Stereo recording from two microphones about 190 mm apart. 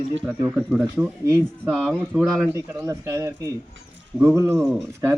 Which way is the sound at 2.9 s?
15° right (ahead or behind).